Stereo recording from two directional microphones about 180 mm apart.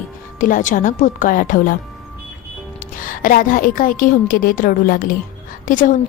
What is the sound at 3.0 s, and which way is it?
A woman's voice, 50° left (ahead or behind).